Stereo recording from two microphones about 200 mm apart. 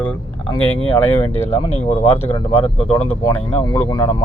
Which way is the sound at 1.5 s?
30° left (ahead or behind).